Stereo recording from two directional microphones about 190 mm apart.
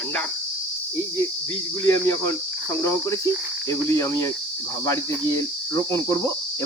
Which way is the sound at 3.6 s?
15° left (ahead or behind).